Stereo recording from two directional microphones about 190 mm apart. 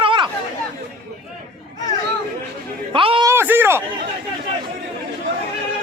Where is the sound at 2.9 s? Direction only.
25° right (ahead or behind).